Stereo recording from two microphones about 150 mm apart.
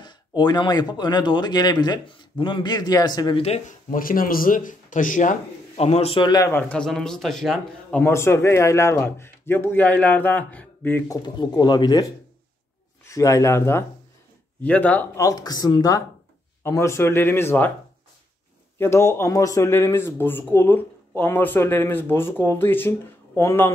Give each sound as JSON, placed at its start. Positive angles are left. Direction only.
{"t": 0.0, "sound": "speech", "side_deg": 30}
{"t": 3.9, "sound": "speech", "side_deg": 70}
{"t": 5.8, "sound": "a man's voice", "side_deg": 45}
{"t": 6.5, "sound": "a man's voice", "side_deg": 5}
{"t": 8.0, "sound": "speech", "side_deg": 15}
{"t": 11.1, "sound": "speech", "side_deg": 25}
{"t": 15.2, "sound": "speech", "side_deg": 25}
{"t": 18.8, "sound": "speech", "side_deg": 15}